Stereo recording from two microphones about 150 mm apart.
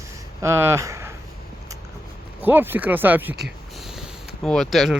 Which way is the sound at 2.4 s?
15° right (ahead or behind).